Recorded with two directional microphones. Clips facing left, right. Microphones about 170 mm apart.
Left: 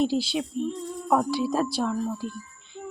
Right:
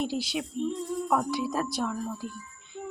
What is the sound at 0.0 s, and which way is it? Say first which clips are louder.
Speech: left 6 dB; 30° left (ahead or behind).